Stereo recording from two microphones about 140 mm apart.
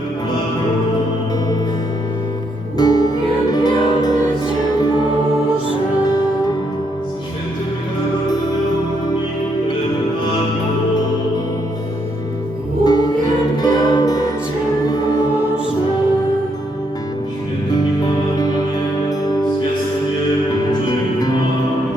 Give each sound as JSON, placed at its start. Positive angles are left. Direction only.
{"t": 2.7, "sound": "music", "side_deg": 30}
{"t": 12.8, "sound": "music", "side_deg": 30}
{"t": 18.3, "sound": "music", "side_deg": 30}